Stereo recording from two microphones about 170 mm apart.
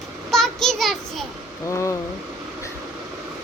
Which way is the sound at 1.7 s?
15° left (ahead or behind).